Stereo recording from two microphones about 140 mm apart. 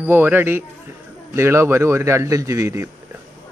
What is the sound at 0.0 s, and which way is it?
A man's voice, 15° right (ahead or behind).